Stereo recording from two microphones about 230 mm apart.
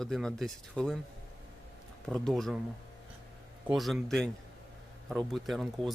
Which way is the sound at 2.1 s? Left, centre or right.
Centre.